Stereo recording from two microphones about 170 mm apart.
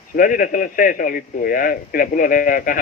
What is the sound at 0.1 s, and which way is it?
A man's voice, 55° left (ahead or behind).